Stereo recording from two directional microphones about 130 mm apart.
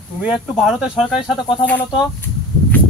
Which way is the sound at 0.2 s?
5° right (ahead or behind).